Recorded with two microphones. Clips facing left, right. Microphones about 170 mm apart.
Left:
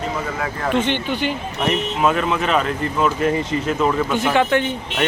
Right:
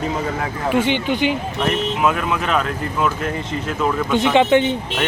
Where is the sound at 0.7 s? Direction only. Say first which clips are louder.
Right 2 dB; 10° right (ahead or behind).